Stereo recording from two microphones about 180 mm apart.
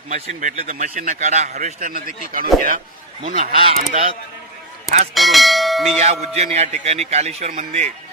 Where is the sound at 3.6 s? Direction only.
35° right (ahead or behind).